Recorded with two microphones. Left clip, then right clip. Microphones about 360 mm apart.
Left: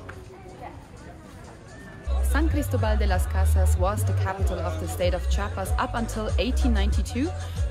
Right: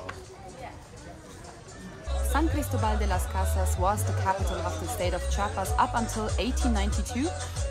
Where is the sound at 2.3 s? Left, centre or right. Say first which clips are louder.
Left 1 dB; centre.